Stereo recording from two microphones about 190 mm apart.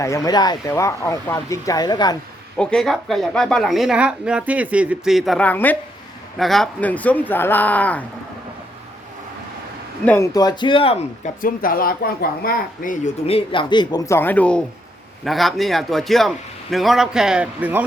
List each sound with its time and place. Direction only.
0.0 s speech: 15° left (ahead or behind)
2.6 s a woman's voice: 5° left (ahead or behind)
10.1 s speech: 15° left (ahead or behind)
11.3 s speech: 45° left (ahead or behind)
13.2 s a woman's voice: 30° left (ahead or behind); by 17.8 s 10° right (ahead or behind)